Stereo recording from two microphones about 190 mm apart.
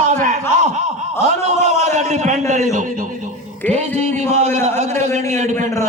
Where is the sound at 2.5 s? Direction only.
40° right (ahead or behind).